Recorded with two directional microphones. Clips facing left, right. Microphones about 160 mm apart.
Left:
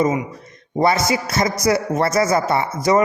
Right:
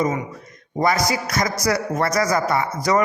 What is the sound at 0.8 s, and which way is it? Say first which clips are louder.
A man's voice: left 3 dB; 25° left (ahead or behind).